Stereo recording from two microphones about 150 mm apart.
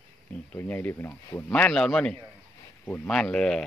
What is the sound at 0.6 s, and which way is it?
Speech, 10° left (ahead or behind).